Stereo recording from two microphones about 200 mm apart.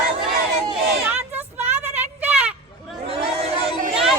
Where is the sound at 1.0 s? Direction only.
10° right (ahead or behind).